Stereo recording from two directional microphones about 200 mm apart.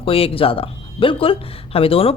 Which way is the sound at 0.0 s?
25° left (ahead or behind).